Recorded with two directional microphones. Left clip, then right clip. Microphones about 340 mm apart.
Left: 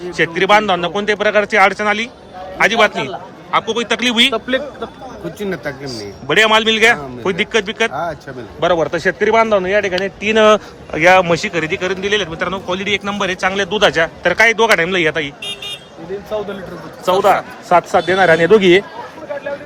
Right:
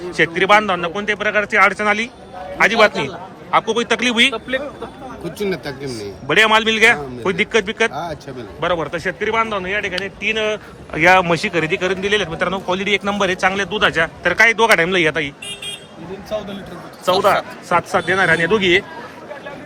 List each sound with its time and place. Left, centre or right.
0.1 s a man's voice: centre
4.3 s speech: left
5.5 s a man's voice: centre; by 10.6 s left
10.9 s a man's voice: centre
17.1 s a man's voice: centre